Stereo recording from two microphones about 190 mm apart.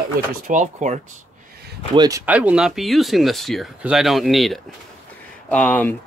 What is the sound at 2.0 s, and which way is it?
Speech, 15° right (ahead or behind).